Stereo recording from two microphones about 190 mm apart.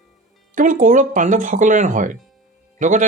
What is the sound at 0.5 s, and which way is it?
Speech, 45° right (ahead or behind).